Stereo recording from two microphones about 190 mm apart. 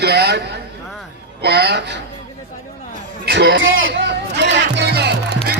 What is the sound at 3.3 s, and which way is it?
Speech, 65° right (ahead or behind).